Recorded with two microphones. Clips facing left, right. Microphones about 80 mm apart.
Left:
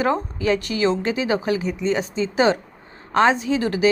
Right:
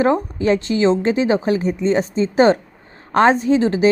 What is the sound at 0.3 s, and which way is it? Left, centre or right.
A woman's voice, right.